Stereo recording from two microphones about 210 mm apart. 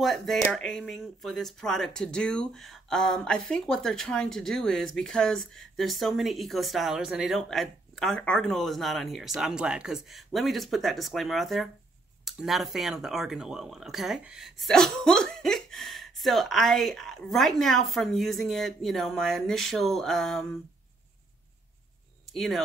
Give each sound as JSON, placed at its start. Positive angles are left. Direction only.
{"t": 0.0, "sound": "speech", "side_deg": 0}
{"t": 22.2, "sound": "speech", "side_deg": 0}